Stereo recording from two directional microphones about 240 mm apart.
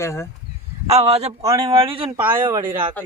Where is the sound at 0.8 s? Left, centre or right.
Right.